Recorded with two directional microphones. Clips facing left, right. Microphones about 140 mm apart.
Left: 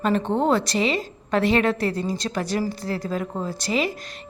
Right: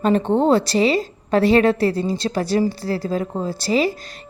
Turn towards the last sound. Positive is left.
turn(degrees=-35)  # may be behind; listen again after turning